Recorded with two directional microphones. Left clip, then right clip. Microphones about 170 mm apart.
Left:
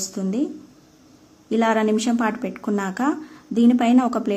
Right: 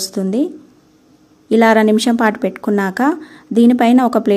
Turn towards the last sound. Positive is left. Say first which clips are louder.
# right 7 dB
turn(degrees=-40)  # may be behind; listen again after turning